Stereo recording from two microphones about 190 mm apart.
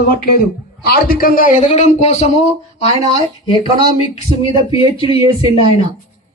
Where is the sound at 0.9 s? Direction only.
50° left (ahead or behind).